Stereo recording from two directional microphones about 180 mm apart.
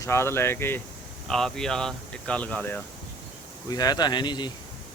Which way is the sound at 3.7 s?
20° left (ahead or behind).